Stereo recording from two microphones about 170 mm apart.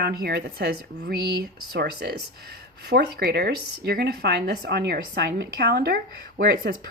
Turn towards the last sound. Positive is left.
turn(degrees=-60)  # may be behind; listen again after turning